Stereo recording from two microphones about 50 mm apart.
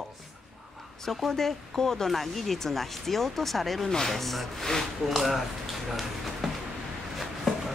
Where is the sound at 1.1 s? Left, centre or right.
Centre.